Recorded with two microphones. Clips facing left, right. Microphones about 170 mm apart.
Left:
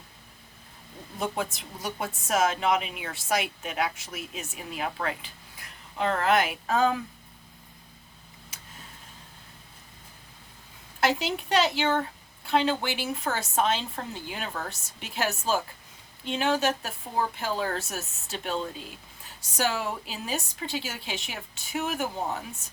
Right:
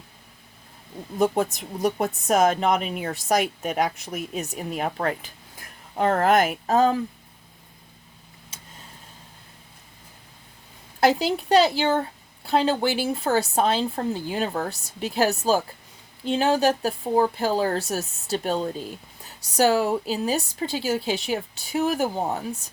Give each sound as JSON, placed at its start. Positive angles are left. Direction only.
{"t": 1.5, "sound": "speech", "side_deg": -40}
{"t": 11.0, "sound": "speech", "side_deg": -35}